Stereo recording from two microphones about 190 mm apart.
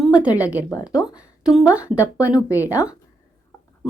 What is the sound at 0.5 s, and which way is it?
Speech, 15° left (ahead or behind).